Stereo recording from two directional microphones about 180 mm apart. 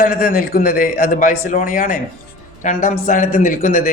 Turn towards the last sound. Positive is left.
turn(degrees=50)  # may be behind; listen again after turning